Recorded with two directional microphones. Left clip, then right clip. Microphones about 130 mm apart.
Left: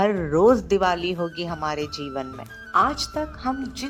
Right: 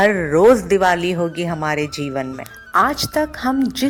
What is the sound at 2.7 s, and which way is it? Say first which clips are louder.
Speech: right 5 dB; 40° right (ahead or behind).